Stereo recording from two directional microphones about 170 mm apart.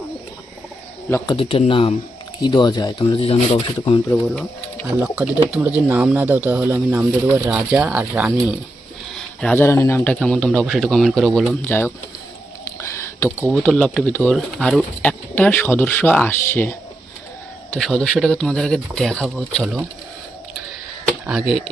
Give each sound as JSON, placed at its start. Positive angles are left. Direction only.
{"t": 1.3, "sound": "speech", "side_deg": 30}
{"t": 4.1, "sound": "speech", "side_deg": 10}
{"t": 4.9, "sound": "speech", "side_deg": -10}
{"t": 9.1, "sound": "a man's voice", "side_deg": 5}
{"t": 11.6, "sound": "speech", "side_deg": 15}
{"t": 12.6, "sound": "a sound", "side_deg": 15}
{"t": 13.5, "sound": "a man's voice", "side_deg": 0}
{"t": 21.2, "sound": "a man's voice", "side_deg": -5}